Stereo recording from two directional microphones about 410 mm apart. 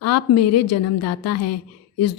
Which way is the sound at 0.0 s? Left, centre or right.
Left.